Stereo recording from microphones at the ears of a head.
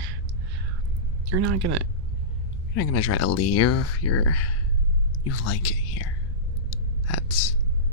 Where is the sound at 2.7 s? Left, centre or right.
Left.